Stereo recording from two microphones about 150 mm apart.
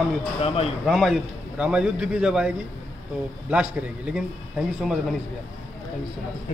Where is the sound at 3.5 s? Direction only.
5° right (ahead or behind).